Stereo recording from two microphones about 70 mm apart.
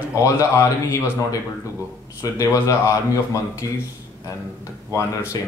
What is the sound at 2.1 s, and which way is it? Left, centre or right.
Speech, left.